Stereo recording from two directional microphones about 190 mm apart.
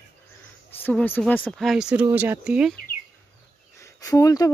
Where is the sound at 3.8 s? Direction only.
20° left (ahead or behind).